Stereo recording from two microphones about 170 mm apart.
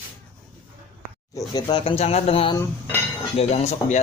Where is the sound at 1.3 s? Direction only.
25° left (ahead or behind).